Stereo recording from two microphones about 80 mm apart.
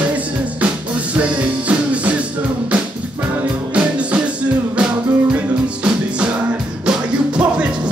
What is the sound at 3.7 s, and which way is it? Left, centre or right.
Music, centre.